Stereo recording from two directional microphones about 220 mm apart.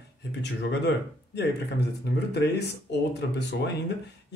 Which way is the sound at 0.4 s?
50° left (ahead or behind).